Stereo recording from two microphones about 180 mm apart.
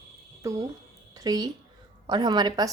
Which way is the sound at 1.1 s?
20° right (ahead or behind).